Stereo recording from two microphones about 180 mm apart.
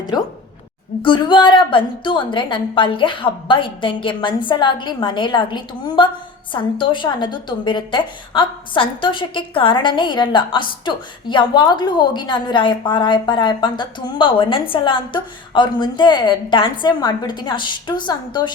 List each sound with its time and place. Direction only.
1.0 s a woman's voice: 25° left (ahead or behind)